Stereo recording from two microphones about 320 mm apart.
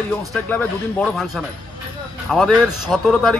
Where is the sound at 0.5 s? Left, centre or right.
Centre.